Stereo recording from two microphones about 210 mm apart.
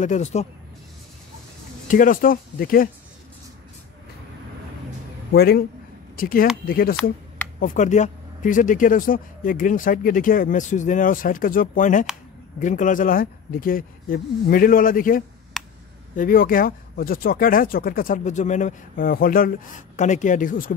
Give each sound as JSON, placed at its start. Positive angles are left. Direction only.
{"t": 0.0, "sound": "speech", "side_deg": 35}
{"t": 1.9, "sound": "speech", "side_deg": 40}
{"t": 5.3, "sound": "speech", "side_deg": 45}
{"t": 15.5, "sound": "a sound", "side_deg": 0}
{"t": 16.2, "sound": "speech", "side_deg": 40}